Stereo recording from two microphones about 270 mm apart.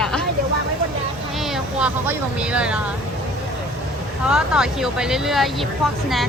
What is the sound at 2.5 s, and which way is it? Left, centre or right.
Speech, centre.